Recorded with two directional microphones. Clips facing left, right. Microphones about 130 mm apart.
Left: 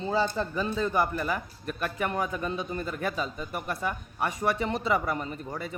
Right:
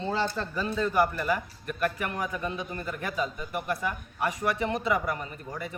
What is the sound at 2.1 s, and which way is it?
A man's voice, 25° left (ahead or behind).